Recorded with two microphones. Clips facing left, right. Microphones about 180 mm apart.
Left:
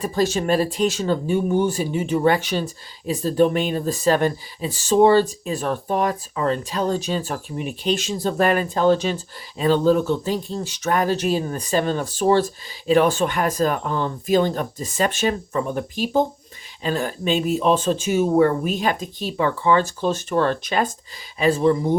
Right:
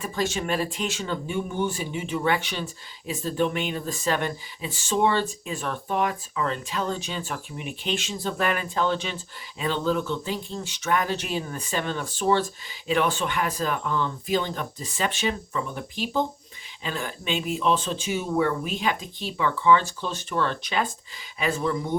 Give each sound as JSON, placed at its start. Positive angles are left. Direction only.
{"t": 0.0, "sound": "speech", "side_deg": 35}
{"t": 21.3, "sound": "speech", "side_deg": 35}